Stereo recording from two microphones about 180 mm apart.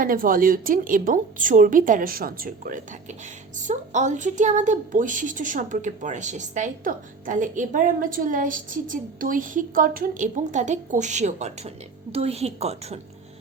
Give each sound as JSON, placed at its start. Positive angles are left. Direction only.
{"t": 0.0, "sound": "a woman's voice", "side_deg": -50}